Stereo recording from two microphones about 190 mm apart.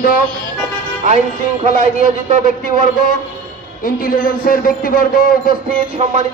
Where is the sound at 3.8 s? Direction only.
45° left (ahead or behind).